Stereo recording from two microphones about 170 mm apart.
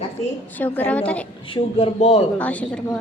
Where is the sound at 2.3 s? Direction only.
10° left (ahead or behind).